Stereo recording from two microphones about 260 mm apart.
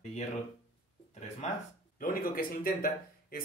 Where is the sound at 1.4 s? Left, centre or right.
Left.